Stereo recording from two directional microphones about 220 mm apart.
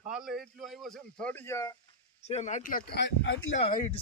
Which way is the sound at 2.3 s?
30° left (ahead or behind).